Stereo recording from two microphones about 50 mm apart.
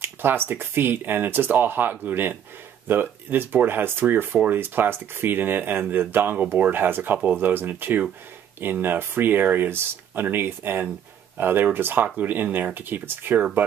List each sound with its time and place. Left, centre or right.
0.0 s speech: right
4.6 s speech: right